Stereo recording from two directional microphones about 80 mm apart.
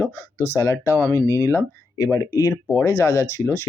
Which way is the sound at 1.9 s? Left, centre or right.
Left.